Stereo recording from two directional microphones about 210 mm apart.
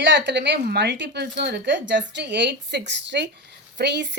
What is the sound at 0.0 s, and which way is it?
A woman's voice, 55° right (ahead or behind).